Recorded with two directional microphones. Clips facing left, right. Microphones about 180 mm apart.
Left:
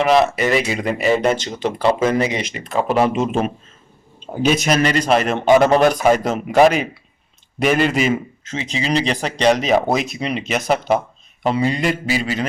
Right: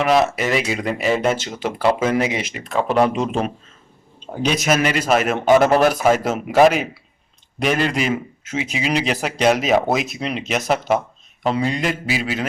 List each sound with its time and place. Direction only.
0.0 s speech: centre (ahead or behind)